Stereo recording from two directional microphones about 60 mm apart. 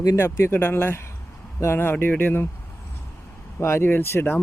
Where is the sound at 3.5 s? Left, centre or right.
Left.